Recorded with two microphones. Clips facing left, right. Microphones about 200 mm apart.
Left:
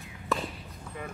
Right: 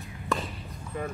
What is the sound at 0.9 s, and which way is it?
Clip-clop, 45° right (ahead or behind).